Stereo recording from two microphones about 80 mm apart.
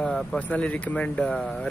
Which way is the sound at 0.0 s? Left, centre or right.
Centre.